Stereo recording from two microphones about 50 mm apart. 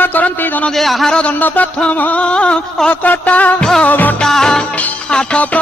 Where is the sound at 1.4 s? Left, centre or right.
Left.